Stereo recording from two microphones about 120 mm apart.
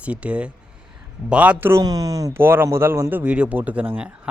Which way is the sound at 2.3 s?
20° right (ahead or behind).